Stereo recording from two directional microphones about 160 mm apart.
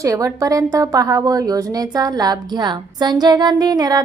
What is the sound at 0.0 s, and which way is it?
A woman's voice, 20° right (ahead or behind).